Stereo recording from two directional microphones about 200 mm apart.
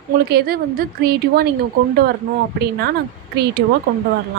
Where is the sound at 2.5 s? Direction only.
55° right (ahead or behind).